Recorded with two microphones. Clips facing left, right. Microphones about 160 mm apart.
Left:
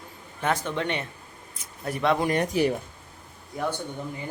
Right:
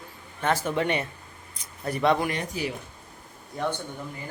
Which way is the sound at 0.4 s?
5° right (ahead or behind).